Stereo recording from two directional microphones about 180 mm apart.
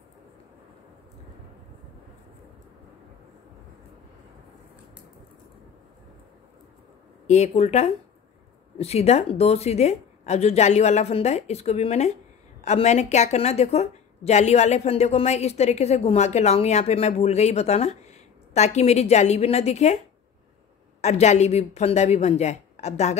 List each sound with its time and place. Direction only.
7.2 s a woman's voice: 40° left (ahead or behind)
21.0 s a woman's voice: 40° left (ahead or behind)